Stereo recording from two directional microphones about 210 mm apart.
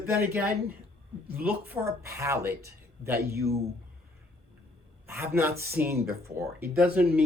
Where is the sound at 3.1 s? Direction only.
50° right (ahead or behind).